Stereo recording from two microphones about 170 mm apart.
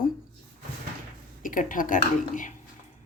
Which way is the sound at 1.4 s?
50° left (ahead or behind).